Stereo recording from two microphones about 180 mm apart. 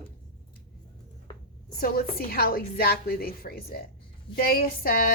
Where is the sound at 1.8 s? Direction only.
60° left (ahead or behind).